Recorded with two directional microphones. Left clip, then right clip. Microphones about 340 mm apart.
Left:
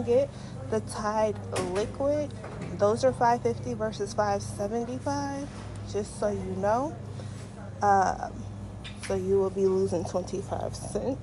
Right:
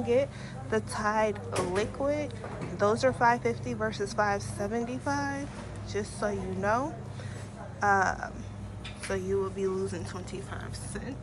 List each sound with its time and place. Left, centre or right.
0.0 s a woman's voice: centre